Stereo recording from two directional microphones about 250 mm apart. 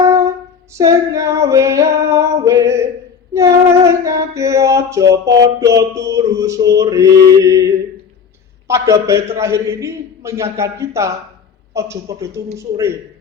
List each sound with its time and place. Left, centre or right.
0.0 s singing: centre
0.8 s female singing: centre
7.3 s a man's voice: centre